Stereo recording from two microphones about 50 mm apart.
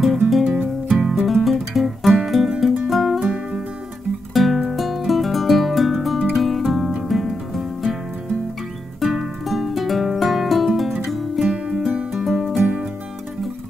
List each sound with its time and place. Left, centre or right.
0.3 s music: centre
9.0 s music: centre
11.4 s music: centre
11.7 s music: centre